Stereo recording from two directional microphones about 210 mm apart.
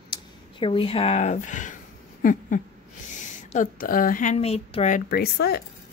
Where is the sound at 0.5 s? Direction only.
25° left (ahead or behind).